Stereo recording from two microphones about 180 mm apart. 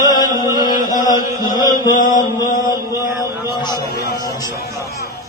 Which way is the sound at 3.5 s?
25° left (ahead or behind).